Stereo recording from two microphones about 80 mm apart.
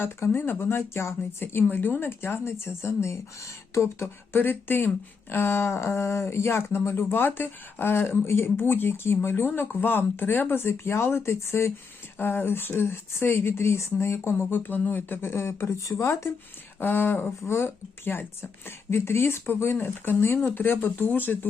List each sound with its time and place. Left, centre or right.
0.0 s speech: left
16.8 s speech: left